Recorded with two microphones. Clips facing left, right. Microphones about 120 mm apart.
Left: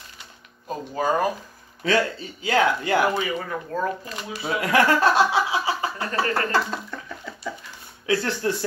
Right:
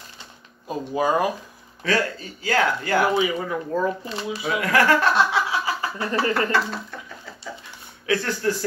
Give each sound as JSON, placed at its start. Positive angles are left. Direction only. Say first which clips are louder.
{"t": 0.7, "sound": "speech", "louder": "right 2 dB", "side_deg": -10}
{"t": 1.9, "sound": "speech", "louder": "left 1 dB", "side_deg": 20}
{"t": 3.2, "sound": "speech", "louder": "right 4 dB", "side_deg": -15}
{"t": 4.0, "sound": "speech", "louder": "right 5 dB", "side_deg": -30}
{"t": 4.4, "sound": "a sound", "louder": "left 1 dB", "side_deg": 25}
{"t": 5.9, "sound": "speech", "louder": "right 2 dB", "side_deg": -25}
{"t": 8.1, "sound": "speech", "louder": "even", "side_deg": 25}